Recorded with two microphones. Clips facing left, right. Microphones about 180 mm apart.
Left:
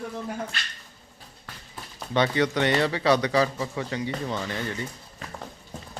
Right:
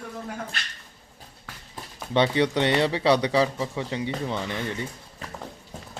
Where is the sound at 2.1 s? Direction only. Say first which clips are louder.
Right 2 dB; 25° right (ahead or behind).